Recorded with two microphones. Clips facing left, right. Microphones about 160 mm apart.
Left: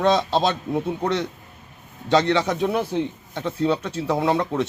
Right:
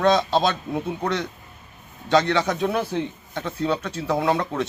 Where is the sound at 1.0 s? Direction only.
25° left (ahead or behind).